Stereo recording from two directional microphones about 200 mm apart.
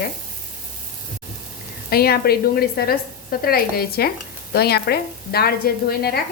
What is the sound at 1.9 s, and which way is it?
Speech, 50° left (ahead or behind).